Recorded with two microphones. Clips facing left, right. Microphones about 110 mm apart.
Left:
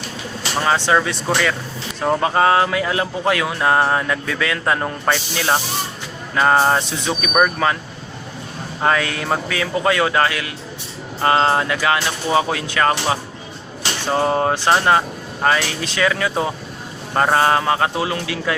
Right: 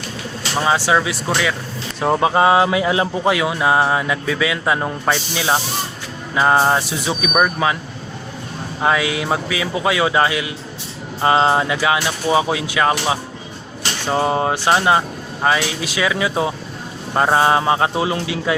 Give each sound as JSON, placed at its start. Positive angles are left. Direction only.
{"t": 0.9, "sound": "speech", "side_deg": -5}
{"t": 8.8, "sound": "speech", "side_deg": -10}